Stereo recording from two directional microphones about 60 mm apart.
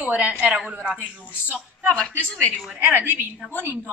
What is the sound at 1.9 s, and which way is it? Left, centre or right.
Speech, centre.